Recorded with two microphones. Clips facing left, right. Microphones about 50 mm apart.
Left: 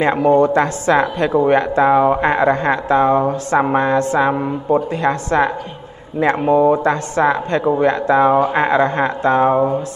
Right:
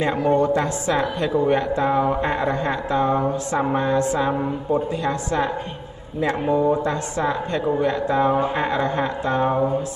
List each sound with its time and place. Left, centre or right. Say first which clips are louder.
0.0 s speech: left 6 dB; left